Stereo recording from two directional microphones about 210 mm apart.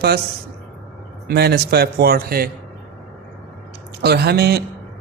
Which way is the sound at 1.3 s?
50° right (ahead or behind).